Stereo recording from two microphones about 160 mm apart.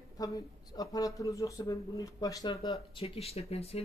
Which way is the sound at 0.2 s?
25° left (ahead or behind).